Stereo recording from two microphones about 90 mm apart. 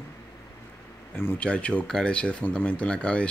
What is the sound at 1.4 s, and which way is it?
Speech, 10° left (ahead or behind).